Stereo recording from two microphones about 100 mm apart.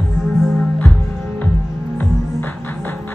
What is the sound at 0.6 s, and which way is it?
Music, 10° left (ahead or behind).